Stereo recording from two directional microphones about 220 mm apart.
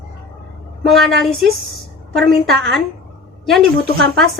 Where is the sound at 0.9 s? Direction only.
Centre (ahead or behind).